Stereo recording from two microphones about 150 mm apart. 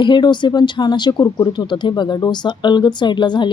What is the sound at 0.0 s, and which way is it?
Speech, 30° left (ahead or behind).